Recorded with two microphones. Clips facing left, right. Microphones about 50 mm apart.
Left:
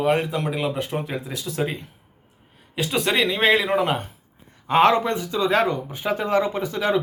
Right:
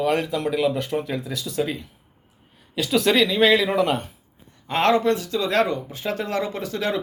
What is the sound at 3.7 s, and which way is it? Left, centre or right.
Speech, left.